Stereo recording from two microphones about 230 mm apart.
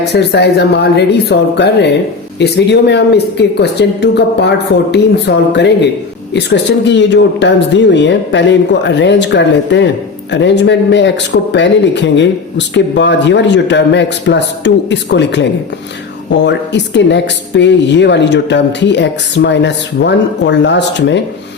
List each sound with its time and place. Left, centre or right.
0.0 s speech: left